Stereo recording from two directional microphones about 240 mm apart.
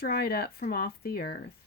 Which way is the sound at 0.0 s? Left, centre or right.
Left.